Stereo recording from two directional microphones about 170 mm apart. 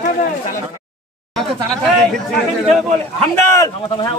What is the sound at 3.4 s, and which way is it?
Speech, 20° left (ahead or behind).